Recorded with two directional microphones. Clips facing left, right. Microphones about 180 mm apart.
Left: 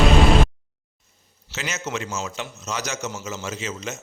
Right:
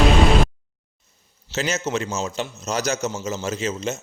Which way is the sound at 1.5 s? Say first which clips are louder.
Right 6 dB; 30° right (ahead or behind).